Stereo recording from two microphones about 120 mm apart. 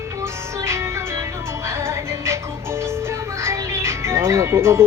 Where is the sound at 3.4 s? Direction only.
25° right (ahead or behind).